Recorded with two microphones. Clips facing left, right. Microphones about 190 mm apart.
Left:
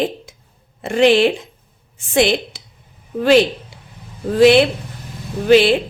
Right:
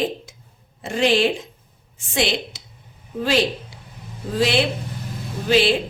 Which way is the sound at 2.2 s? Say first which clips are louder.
Left 7 dB; 55° left (ahead or behind).